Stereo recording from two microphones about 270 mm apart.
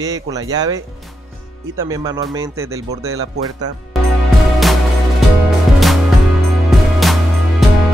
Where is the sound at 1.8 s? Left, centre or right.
Centre.